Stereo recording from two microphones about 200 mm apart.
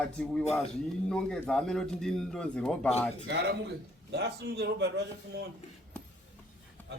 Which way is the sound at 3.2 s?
55° right (ahead or behind).